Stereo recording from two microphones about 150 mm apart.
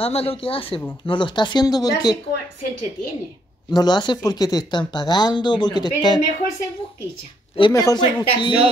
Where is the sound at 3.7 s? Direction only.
30° left (ahead or behind).